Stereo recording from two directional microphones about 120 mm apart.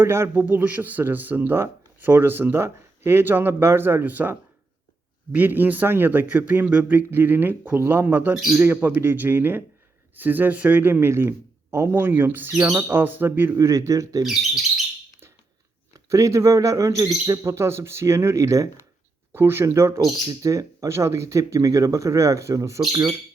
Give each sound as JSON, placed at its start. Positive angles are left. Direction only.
{"t": 0.0, "sound": "speech", "side_deg": -20}
{"t": 16.0, "sound": "speech", "side_deg": -25}